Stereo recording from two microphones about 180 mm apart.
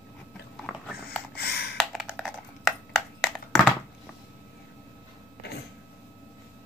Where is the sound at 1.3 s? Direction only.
60° left (ahead or behind).